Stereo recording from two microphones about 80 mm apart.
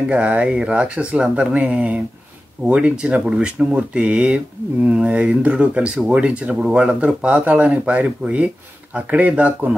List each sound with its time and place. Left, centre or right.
0.1 s speech: centre